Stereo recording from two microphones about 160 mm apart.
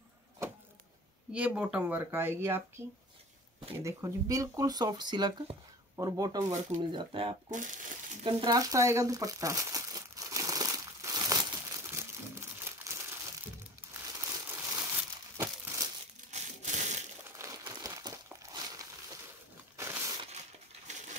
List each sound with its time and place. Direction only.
1.3 s speech: 5° right (ahead or behind)
3.8 s speech: 20° right (ahead or behind)
6.9 s speech: 30° right (ahead or behind)
7.5 s speech: 55° right (ahead or behind)
8.2 s crumpling: 35° right (ahead or behind); by 15.8 s 15° right (ahead or behind)
16.3 s a sound: 45° right (ahead or behind)
17.4 s crumpling: 20° right (ahead or behind)
19.8 s crushing: 15° right (ahead or behind)
20.8 s crushing: 45° right (ahead or behind)